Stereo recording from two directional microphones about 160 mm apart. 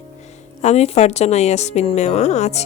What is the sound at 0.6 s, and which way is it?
Speech, 45° left (ahead or behind).